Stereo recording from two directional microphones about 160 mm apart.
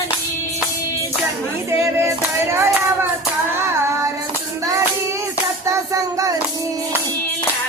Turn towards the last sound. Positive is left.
turn(degrees=-20)  # may be behind; listen again after turning